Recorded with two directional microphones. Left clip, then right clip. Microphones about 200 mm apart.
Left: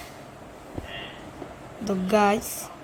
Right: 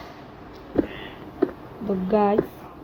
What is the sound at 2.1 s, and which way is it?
Speech, 15° left (ahead or behind).